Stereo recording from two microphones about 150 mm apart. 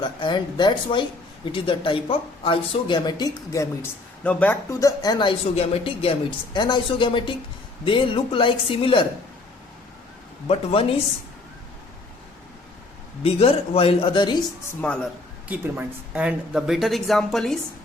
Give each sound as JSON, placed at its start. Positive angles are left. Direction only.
{"t": 0.0, "sound": "speech", "side_deg": 30}
{"t": 4.2, "sound": "speech", "side_deg": 10}
{"t": 10.5, "sound": "speech", "side_deg": 40}
{"t": 13.2, "sound": "speech", "side_deg": 40}
{"t": 14.8, "sound": "speech", "side_deg": 10}
{"t": 15.4, "sound": "speech", "side_deg": -10}